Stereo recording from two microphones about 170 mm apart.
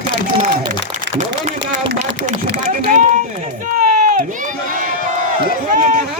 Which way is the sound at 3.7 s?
55° right (ahead or behind).